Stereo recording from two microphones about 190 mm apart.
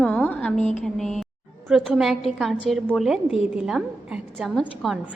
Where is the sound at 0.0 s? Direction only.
5° left (ahead or behind).